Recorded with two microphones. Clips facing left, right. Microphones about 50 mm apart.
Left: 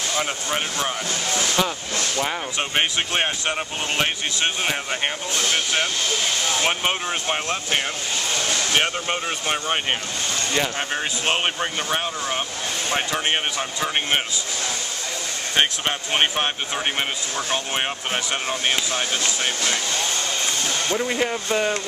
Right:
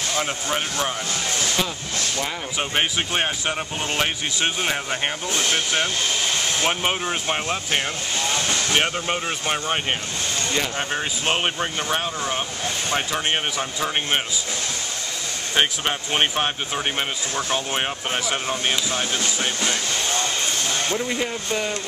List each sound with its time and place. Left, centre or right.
0.1 s speech: centre
2.1 s speech: centre
16.1 s speech: centre
21.0 s speech: centre